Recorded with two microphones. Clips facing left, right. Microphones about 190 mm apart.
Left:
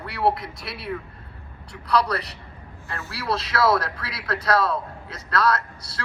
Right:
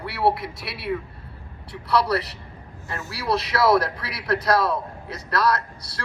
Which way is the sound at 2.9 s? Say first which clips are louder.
Right 2 dB; 15° right (ahead or behind).